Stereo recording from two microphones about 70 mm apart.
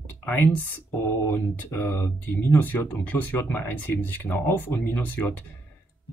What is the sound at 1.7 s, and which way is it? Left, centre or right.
Speech, left.